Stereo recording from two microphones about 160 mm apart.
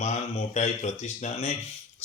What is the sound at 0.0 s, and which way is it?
Speech, 45° left (ahead or behind).